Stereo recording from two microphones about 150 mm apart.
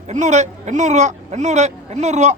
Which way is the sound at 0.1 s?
50° right (ahead or behind).